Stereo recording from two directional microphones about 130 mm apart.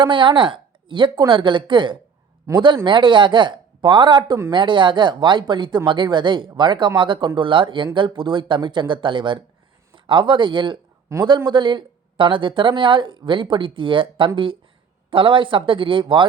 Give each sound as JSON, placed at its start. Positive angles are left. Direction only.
{"t": 0.0, "sound": "a woman's voice", "side_deg": -40}
{"t": 2.5, "sound": "speech", "side_deg": -20}
{"t": 2.8, "sound": "speech", "side_deg": -40}